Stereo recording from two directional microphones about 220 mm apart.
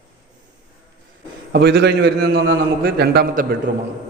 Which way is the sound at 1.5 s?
50° right (ahead or behind).